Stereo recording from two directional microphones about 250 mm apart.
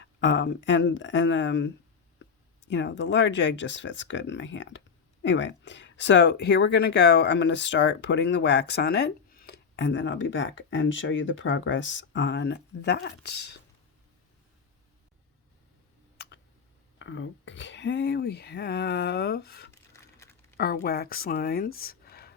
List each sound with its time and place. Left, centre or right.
0.0 s speech: left
17.0 s speech: left
19.7 s typing: centre
20.6 s speech: left